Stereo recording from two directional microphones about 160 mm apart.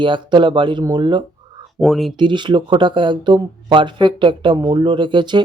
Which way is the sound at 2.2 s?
30° right (ahead or behind).